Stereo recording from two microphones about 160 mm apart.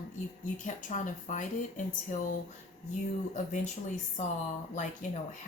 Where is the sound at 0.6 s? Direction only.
50° left (ahead or behind).